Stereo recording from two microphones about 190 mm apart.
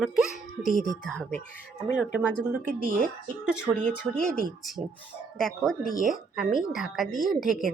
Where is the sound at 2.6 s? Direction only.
45° right (ahead or behind).